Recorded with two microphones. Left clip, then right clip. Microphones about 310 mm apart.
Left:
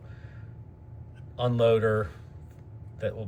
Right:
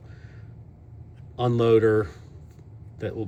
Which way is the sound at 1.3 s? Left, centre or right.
Centre.